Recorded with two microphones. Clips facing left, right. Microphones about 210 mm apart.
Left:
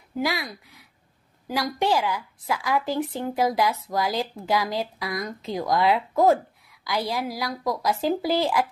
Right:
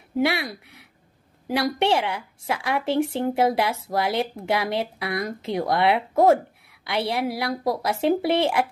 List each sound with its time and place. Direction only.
0.1 s a woman's voice: 30° right (ahead or behind)